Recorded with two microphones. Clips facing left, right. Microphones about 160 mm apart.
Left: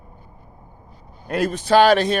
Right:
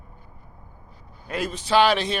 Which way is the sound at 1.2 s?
50° left (ahead or behind).